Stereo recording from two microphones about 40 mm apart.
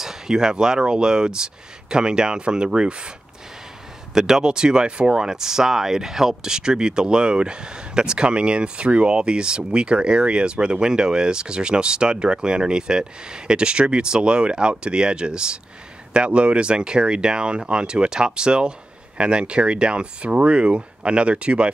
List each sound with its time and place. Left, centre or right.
0.0 s speech: centre
4.1 s speech: centre; by 21.6 s right